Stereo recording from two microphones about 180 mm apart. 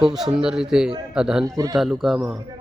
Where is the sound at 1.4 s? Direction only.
20° right (ahead or behind).